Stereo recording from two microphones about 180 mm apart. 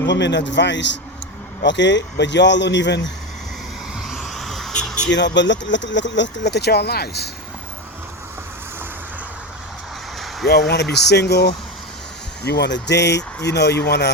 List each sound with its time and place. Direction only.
0.0 s speech: 75° left (ahead or behind)
4.0 s a sound: centre (ahead or behind)
5.0 s speech: 80° left; by 7.3 s 60° left (ahead or behind)
10.9 s speech: 70° left (ahead or behind)